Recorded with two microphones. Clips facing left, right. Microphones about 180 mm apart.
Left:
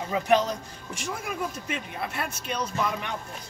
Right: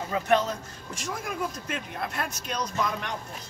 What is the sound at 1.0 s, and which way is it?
Speech, 5° left (ahead or behind).